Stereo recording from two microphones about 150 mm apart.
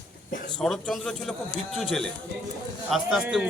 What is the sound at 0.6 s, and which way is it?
A man's voice, 5° left (ahead or behind).